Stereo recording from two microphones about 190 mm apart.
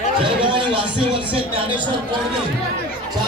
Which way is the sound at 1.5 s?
25° right (ahead or behind).